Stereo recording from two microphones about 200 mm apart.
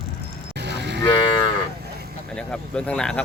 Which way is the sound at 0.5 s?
55° right (ahead or behind).